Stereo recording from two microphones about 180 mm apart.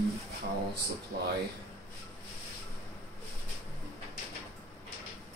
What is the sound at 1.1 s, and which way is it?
Speech, 60° right (ahead or behind).